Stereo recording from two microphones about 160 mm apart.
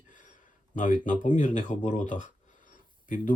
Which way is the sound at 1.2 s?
55° left (ahead or behind).